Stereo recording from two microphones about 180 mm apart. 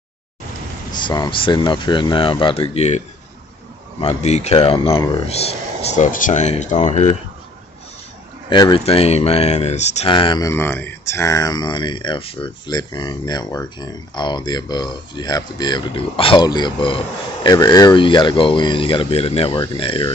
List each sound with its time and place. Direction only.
0.9 s speech: 25° left (ahead or behind)
4.0 s speech: 40° left (ahead or behind)
8.5 s speech: 25° left (ahead or behind)
10.5 s speech: 10° left (ahead or behind); by 20.1 s 30° left (ahead or behind)